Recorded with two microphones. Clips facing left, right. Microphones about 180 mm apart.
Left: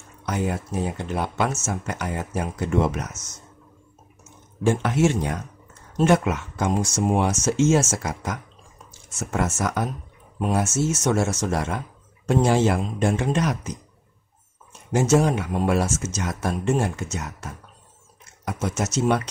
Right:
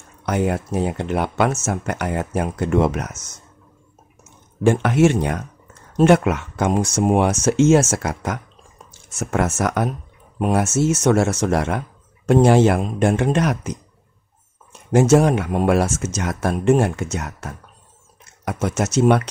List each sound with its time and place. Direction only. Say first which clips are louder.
0.2 s speech: right 5 dB; 60° right (ahead or behind)
4.6 s speech: right 5 dB; 65° right (ahead or behind)
14.9 s speech: right 5 dB; 60° right (ahead or behind)